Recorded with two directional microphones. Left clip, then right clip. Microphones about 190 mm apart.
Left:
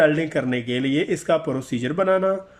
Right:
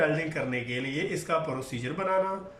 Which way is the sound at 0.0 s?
45° left (ahead or behind).